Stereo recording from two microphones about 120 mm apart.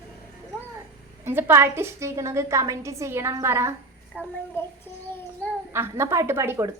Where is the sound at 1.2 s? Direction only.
20° right (ahead or behind).